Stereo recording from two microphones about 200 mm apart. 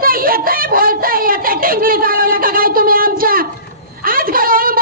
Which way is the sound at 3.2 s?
45° right (ahead or behind).